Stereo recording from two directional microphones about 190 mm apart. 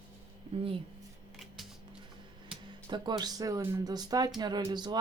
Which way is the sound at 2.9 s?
25° right (ahead or behind).